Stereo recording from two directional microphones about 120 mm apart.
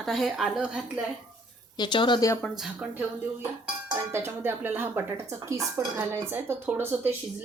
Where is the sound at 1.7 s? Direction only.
40° left (ahead or behind).